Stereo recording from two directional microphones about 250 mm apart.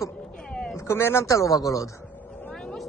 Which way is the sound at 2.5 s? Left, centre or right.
Centre.